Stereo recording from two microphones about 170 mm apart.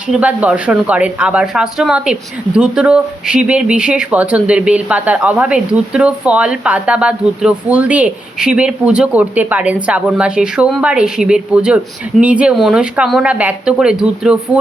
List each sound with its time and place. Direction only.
0.1 s speech: 10° right (ahead or behind)